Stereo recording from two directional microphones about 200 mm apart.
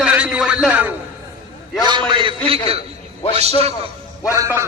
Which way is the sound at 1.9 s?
25° right (ahead or behind).